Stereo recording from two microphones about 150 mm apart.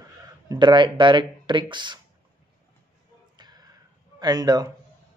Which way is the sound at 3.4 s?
25° right (ahead or behind).